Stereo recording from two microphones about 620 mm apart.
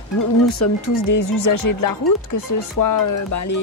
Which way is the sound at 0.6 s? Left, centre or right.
Left.